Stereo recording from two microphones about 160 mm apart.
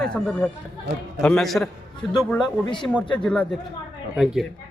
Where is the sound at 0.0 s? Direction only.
5° left (ahead or behind).